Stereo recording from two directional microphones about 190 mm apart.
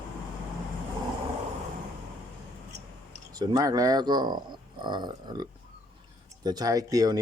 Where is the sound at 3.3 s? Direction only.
20° right (ahead or behind).